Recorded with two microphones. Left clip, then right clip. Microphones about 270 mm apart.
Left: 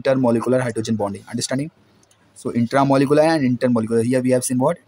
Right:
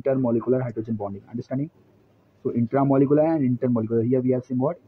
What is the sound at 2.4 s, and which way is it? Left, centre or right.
Speech, left.